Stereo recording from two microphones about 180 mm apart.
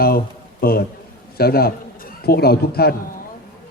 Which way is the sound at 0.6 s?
55° left (ahead or behind).